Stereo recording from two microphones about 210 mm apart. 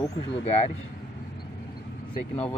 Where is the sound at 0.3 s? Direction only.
30° left (ahead or behind).